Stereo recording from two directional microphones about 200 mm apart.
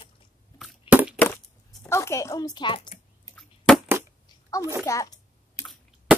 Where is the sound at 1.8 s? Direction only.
15° left (ahead or behind).